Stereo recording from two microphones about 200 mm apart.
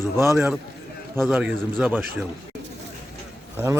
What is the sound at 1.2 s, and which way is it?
Speech, 5° right (ahead or behind).